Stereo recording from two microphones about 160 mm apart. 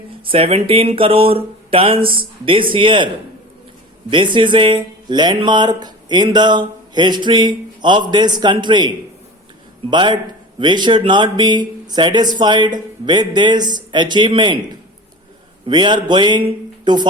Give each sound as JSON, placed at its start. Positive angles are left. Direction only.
{"t": 0.3, "sound": "speech", "side_deg": -35}
{"t": 4.1, "sound": "speech", "side_deg": -30}
{"t": 9.9, "sound": "speech", "side_deg": -30}
{"t": 15.6, "sound": "speech", "side_deg": -30}